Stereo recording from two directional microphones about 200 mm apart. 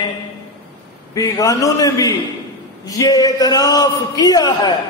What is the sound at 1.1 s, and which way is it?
A man's voice, 15° left (ahead or behind).